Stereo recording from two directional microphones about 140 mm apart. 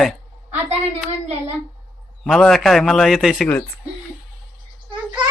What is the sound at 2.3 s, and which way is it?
Speech, 5° left (ahead or behind).